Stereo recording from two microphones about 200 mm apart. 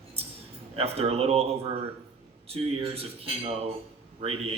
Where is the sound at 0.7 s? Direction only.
30° right (ahead or behind).